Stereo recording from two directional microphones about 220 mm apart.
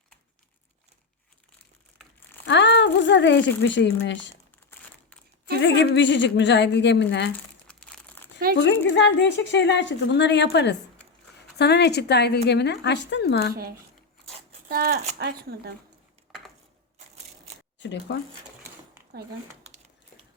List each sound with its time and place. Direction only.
2.5 s speech: 55° left (ahead or behind)
5.5 s a woman's voice: 55° left (ahead or behind)
7.7 s crumpling: 5° left (ahead or behind)
8.9 s a woman's voice: 55° left (ahead or behind)
13.5 s speech: 45° right (ahead or behind)
17.7 s speech: 55° left (ahead or behind)
19.1 s speech: 45° right (ahead or behind)